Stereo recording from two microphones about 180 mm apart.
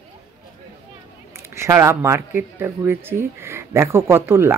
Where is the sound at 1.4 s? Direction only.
15° right (ahead or behind).